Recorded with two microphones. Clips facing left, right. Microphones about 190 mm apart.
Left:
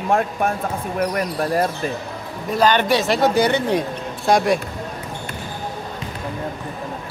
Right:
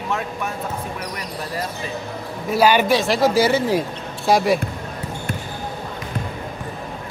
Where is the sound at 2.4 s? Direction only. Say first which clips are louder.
Right 1 dB; 10° right (ahead or behind).